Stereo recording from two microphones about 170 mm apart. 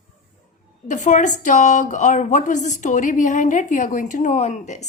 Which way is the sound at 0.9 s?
45° left (ahead or behind).